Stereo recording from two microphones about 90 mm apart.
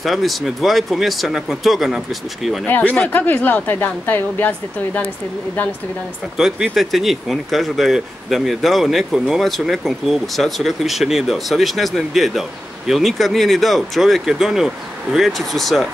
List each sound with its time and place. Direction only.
0.0 s speech: centre (ahead or behind)
2.6 s a woman's voice: 15° left (ahead or behind)
6.3 s speech: 5° right (ahead or behind)